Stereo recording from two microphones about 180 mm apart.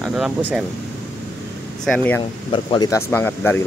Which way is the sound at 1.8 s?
5° left (ahead or behind).